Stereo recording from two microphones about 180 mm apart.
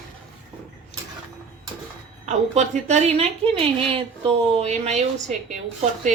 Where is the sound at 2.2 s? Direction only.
40° right (ahead or behind).